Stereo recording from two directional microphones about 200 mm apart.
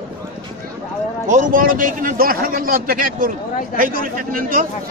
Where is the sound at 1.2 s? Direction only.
40° right (ahead or behind).